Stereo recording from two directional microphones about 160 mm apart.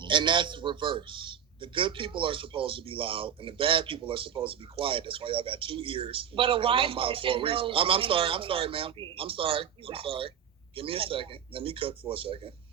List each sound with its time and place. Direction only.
0.0 s a man's voice: 30° right (ahead or behind)